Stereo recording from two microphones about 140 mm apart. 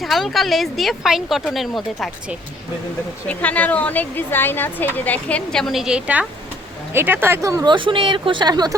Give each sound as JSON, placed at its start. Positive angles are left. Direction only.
{"t": 0.0, "sound": "speech", "side_deg": 0}
{"t": 3.2, "sound": "a woman's voice", "side_deg": 10}